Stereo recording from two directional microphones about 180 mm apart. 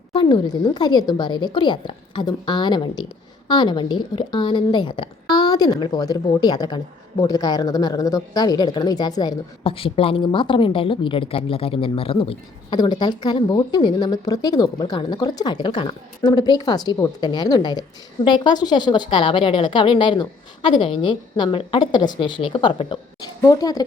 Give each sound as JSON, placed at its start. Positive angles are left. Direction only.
{"t": 0.1, "sound": "speech", "side_deg": 25}